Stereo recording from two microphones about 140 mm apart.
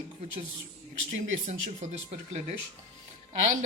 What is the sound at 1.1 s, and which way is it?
Speech, 60° right (ahead or behind).